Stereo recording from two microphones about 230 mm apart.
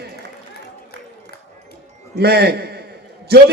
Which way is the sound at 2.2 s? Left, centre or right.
Right.